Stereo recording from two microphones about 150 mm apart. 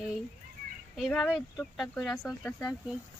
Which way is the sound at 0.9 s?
Centre (ahead or behind).